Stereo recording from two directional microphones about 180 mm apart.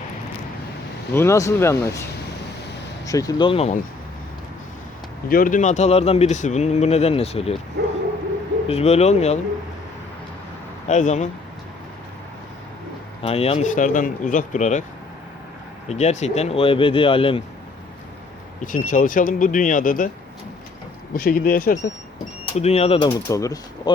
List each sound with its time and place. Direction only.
1.1 s speech: 15° left (ahead or behind)
3.1 s speech: 20° left (ahead or behind)
5.3 s speech: 50° left (ahead or behind)
8.6 s speech: 35° left (ahead or behind)
10.8 s speech: 40° left (ahead or behind)
13.2 s speech: 35° left (ahead or behind)
15.9 s speech: 40° left (ahead or behind)
18.6 s speech: 45° left (ahead or behind)
21.1 s speech: 55° left (ahead or behind)
22.4 s speech: 35° left (ahead or behind); by 23.9 s 20° left (ahead or behind)